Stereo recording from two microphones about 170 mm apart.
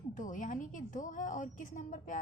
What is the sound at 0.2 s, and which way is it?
A woman's voice, 50° left (ahead or behind).